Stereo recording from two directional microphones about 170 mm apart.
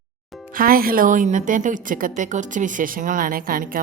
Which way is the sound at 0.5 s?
60° right (ahead or behind).